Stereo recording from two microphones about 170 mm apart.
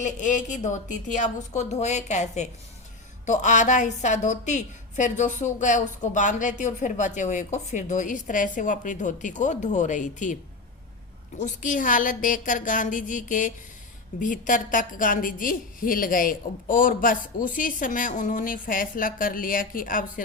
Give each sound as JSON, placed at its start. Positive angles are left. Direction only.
{"t": 0.0, "sound": "a woman's voice", "side_deg": 50}
{"t": 11.3, "sound": "a woman's voice", "side_deg": 45}